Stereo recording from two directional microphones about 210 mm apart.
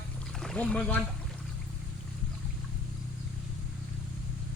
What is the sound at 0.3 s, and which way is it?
Speech, 5° left (ahead or behind).